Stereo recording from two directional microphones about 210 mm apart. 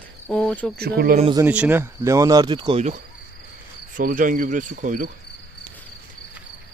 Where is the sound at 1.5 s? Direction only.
5° right (ahead or behind); by 2.9 s 25° right (ahead or behind).